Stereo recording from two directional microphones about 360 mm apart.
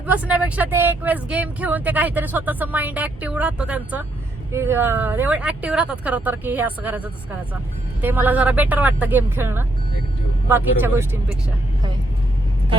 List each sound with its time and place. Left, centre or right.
0.0 s speech: centre